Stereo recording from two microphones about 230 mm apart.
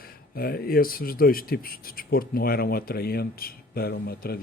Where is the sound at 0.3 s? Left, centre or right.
Left.